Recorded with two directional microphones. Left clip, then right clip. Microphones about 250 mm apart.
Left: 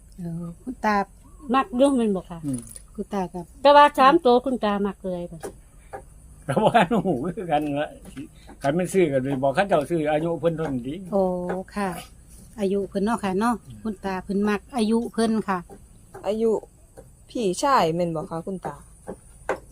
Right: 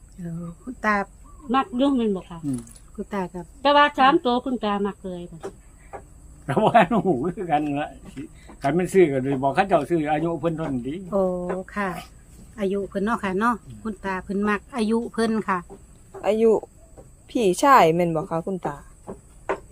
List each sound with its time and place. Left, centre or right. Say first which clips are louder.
0.2 s speech: even; centre
1.5 s speech: left 2 dB; left
2.5 s speech: right 1 dB; centre
3.6 s speech: left 3 dB; left
6.4 s speech: right 2 dB; centre
16.2 s speech: right 4 dB; right